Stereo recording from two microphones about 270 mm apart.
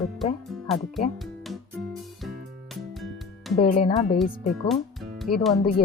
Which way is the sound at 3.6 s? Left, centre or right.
Left.